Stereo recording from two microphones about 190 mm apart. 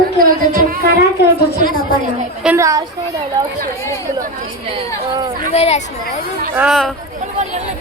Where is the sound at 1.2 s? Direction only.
60° left (ahead or behind).